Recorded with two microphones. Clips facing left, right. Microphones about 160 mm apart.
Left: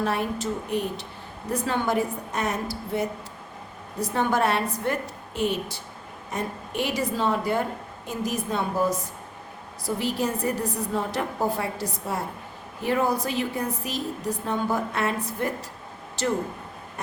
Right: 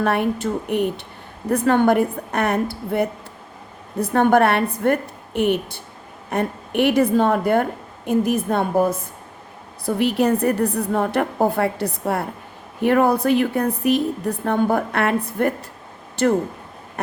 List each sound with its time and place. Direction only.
0.0 s a woman's voice: 60° right (ahead or behind)